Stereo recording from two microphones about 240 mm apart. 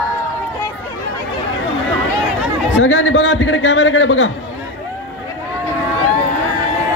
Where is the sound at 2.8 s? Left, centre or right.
Left.